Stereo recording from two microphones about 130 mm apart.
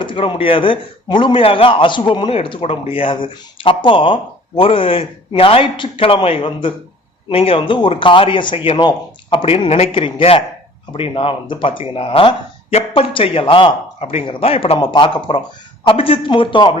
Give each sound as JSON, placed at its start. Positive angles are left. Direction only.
{"t": 0.0, "sound": "speech", "side_deg": 40}